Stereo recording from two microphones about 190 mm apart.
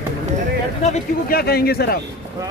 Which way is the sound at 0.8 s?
35° left (ahead or behind).